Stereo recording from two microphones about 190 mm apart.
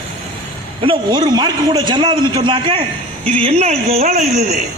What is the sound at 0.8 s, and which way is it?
A man's voice, 25° right (ahead or behind).